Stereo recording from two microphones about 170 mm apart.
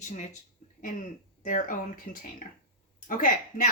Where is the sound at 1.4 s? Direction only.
50° left (ahead or behind).